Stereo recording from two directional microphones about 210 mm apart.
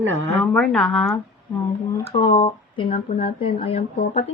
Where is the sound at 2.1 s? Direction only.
20° left (ahead or behind).